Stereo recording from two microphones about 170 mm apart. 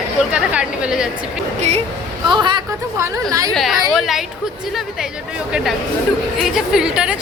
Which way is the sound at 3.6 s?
Centre (ahead or behind).